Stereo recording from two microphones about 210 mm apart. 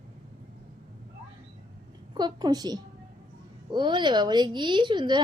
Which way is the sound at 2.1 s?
20° right (ahead or behind).